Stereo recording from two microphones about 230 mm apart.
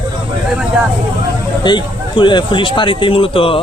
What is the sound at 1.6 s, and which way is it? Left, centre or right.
Speech, centre.